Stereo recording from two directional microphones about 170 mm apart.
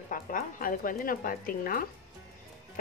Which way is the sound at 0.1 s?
55° left (ahead or behind).